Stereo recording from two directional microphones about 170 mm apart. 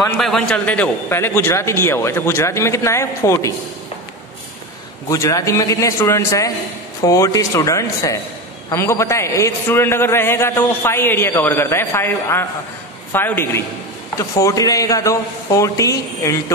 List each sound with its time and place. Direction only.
0.2 s a man's voice: 5° left (ahead or behind)
5.1 s a man's voice: 20° left (ahead or behind)